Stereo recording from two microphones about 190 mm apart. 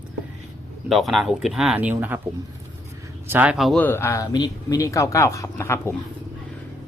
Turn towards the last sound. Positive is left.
turn(degrees=15)  # may be behind; listen again after turning